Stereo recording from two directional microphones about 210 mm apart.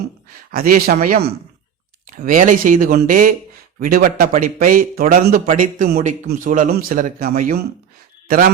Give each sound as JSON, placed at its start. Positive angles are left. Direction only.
{"t": 0.5, "sound": "a man's voice", "side_deg": -45}